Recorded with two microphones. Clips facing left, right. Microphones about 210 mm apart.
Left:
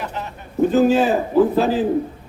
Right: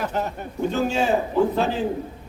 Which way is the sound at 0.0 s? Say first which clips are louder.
Right 3 dB; 45° right (ahead or behind).